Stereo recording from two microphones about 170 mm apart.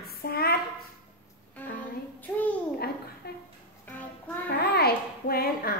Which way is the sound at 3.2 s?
70° left (ahead or behind).